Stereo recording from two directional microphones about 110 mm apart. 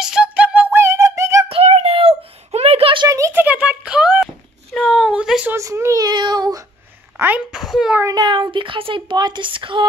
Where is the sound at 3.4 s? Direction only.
10° right (ahead or behind).